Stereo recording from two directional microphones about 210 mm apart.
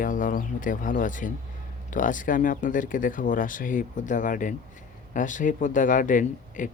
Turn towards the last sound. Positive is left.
turn(degrees=40)  # may be behind; listen again after turning